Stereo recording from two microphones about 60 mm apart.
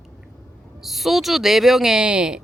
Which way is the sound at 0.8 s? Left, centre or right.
Centre.